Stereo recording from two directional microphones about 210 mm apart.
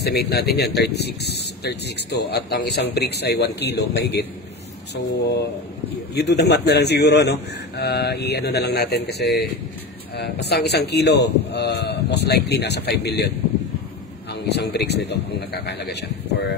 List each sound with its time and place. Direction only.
0.0 s a man's voice: 50° left (ahead or behind)
14.5 s a man's voice: 50° left (ahead or behind)